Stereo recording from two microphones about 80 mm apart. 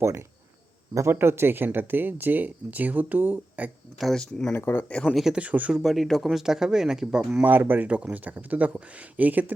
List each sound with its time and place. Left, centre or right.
0.9 s speech: right
4.0 s speech: centre
4.5 s speech: left
5.0 s speech: centre
5.4 s speech: centre
5.7 s speech: centre
7.4 s speech: right